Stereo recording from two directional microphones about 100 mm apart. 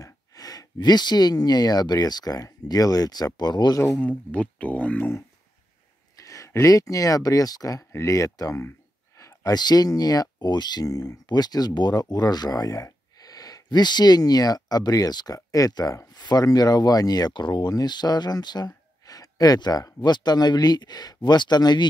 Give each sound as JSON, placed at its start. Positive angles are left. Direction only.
{"t": 0.0, "sound": "speech", "side_deg": 35}
{"t": 4.0, "sound": "speech", "side_deg": 15}
{"t": 6.2, "sound": "speech", "side_deg": 30}